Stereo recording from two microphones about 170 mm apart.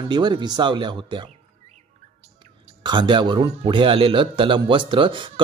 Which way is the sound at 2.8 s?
25° right (ahead or behind).